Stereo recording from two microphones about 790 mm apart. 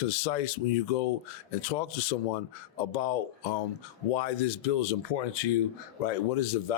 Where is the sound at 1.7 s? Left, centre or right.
Left.